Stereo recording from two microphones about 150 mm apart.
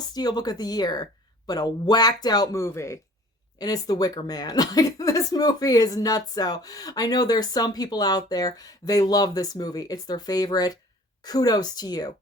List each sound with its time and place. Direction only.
0.0 s speech: 25° left (ahead or behind)